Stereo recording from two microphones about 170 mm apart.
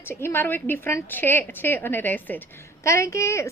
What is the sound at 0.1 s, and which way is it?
A woman's voice, 15° left (ahead or behind).